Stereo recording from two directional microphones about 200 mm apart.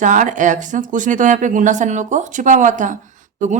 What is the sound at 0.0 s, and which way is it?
A woman's voice, 40° right (ahead or behind).